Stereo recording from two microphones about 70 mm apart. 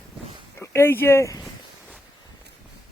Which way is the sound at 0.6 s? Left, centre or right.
Left.